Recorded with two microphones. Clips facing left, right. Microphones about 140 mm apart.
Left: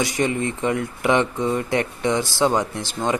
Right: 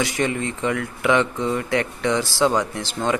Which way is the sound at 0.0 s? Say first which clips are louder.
Left 1 dB; 20° left (ahead or behind).